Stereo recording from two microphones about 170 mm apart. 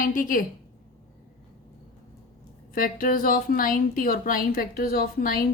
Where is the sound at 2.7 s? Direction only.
55° left (ahead or behind).